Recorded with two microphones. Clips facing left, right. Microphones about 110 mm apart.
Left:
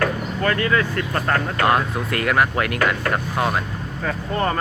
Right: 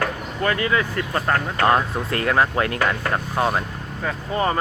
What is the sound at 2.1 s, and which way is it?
Speech, 30° right (ahead or behind).